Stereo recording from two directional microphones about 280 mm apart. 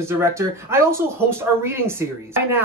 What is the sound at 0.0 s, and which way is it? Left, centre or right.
Speech, centre.